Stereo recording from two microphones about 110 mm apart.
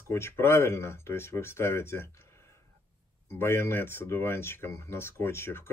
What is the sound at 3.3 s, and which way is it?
Speech, 20° left (ahead or behind).